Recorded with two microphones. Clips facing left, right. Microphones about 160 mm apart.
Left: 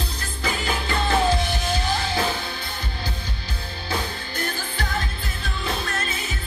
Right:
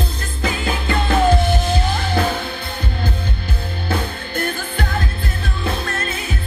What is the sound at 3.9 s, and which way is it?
Music, 60° right (ahead or behind).